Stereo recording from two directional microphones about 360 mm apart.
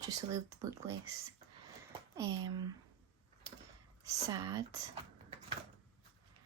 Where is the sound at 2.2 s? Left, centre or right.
Centre.